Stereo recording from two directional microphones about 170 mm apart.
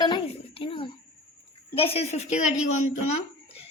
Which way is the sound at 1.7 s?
35° left (ahead or behind).